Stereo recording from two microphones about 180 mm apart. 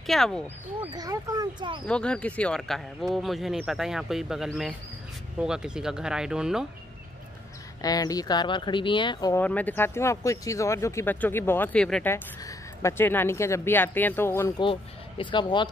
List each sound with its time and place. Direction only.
0.0 s speech: centre (ahead or behind)
0.9 s speech: 20° right (ahead or behind)
1.9 s speech: 5° left (ahead or behind)
7.8 s speech: 20° left (ahead or behind)
9.4 s speech: 10° left (ahead or behind)
14.6 s speech: 25° left (ahead or behind)